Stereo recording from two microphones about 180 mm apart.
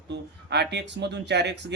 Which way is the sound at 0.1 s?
70° right (ahead or behind).